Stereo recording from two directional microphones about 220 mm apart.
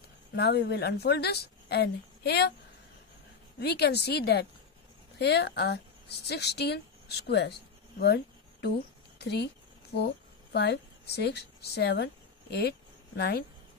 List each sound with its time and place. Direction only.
0.4 s speech: 50° left (ahead or behind)
3.5 s speech: 45° left (ahead or behind)
8.0 s insect: 45° left (ahead or behind)
9.2 s speech: 50° left (ahead or behind)